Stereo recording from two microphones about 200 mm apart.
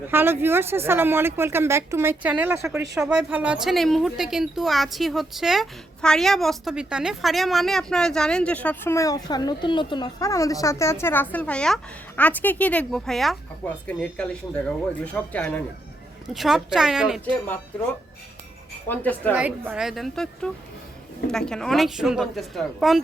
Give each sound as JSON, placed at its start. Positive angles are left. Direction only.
{"t": 0.1, "sound": "a woman's voice", "side_deg": -10}
{"t": 18.9, "sound": "a man's voice", "side_deg": 10}
{"t": 19.3, "sound": "a woman's voice", "side_deg": -10}